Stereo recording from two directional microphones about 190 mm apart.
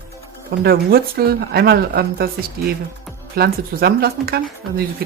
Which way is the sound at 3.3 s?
55° right (ahead or behind).